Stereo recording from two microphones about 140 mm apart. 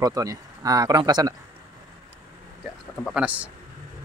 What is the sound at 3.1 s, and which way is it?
Speech, 10° right (ahead or behind).